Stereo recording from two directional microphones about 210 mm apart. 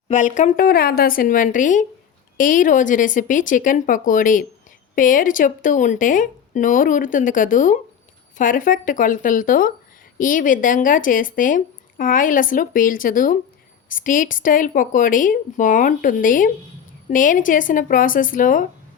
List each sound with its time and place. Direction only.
0.1 s speech: 35° left (ahead or behind)